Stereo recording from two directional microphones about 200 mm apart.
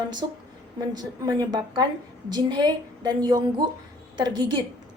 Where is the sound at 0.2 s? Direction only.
25° right (ahead or behind).